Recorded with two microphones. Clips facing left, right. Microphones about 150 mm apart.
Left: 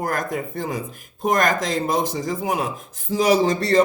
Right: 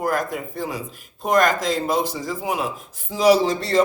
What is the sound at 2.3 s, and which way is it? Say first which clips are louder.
A man's voice: left 1 dB; 45° left (ahead or behind).